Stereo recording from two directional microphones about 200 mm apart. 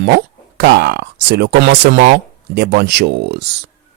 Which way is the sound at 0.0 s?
55° right (ahead or behind).